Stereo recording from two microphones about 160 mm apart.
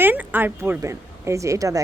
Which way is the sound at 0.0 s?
10° right (ahead or behind).